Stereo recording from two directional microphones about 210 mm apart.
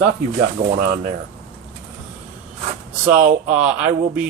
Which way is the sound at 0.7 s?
50° right (ahead or behind).